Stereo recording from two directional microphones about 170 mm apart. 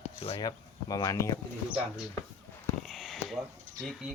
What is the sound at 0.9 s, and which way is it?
Speech, 20° left (ahead or behind).